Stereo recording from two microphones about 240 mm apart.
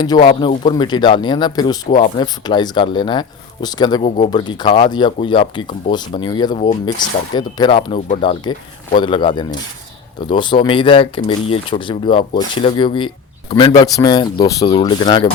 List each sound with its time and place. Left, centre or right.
0.3 s speech: centre